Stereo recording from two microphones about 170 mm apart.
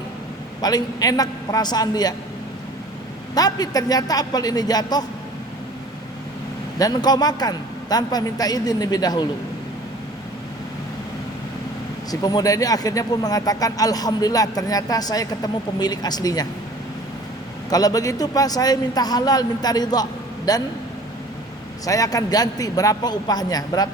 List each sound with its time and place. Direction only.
0.6 s speech: 20° left (ahead or behind)
3.3 s speech: 20° left (ahead or behind)
6.7 s speech: 20° left (ahead or behind)
12.2 s speech: 20° left (ahead or behind)
17.7 s speech: 20° left (ahead or behind)
21.8 s speech: 20° left (ahead or behind)